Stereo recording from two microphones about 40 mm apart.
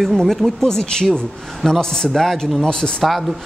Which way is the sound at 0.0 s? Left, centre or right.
Centre.